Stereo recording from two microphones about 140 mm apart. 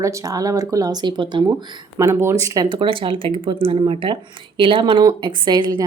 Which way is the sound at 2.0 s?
20° right (ahead or behind).